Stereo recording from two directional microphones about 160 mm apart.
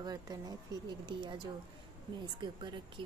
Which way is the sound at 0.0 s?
25° right (ahead or behind).